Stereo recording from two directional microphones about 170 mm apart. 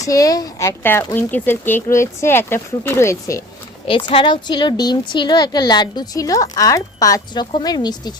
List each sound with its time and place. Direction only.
0.0 s speech: 20° left (ahead or behind)
3.8 s speech: 30° left (ahead or behind)